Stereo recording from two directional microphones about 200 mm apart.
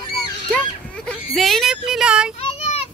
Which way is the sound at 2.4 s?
30° left (ahead or behind).